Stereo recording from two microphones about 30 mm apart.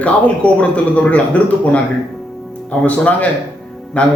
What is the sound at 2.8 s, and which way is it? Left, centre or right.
Speech, left.